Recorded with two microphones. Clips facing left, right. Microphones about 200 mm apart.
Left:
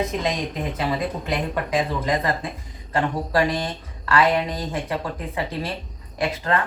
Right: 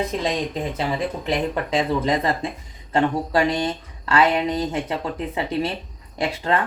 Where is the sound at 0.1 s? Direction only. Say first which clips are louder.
Right 1 dB; 30° right (ahead or behind).